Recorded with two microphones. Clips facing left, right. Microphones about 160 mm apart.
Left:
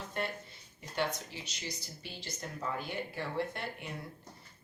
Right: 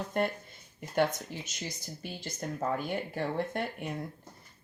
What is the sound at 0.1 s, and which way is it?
Speech, 50° right (ahead or behind).